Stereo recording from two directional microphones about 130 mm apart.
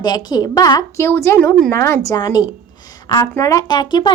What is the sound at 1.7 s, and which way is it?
Speech, 20° left (ahead or behind).